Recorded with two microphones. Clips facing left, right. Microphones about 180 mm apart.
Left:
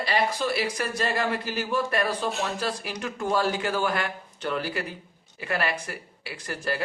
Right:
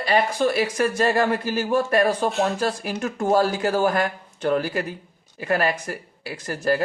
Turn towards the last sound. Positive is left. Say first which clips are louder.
# right 8 dB
turn(degrees=-45)  # may be behind; listen again after turning